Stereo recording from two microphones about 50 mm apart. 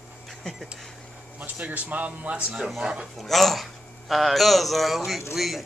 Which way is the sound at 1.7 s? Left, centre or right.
Right.